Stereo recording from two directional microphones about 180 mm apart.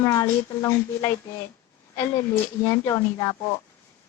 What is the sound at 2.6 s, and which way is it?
Speech, 20° left (ahead or behind).